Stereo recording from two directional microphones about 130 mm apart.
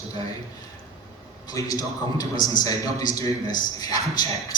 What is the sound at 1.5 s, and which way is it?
A man's voice, 25° left (ahead or behind).